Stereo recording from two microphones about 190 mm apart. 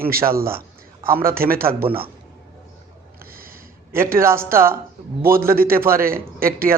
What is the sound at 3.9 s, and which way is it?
Speech, 15° right (ahead or behind).